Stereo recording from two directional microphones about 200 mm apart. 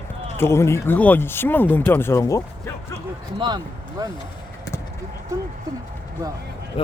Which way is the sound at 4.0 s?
15° right (ahead or behind).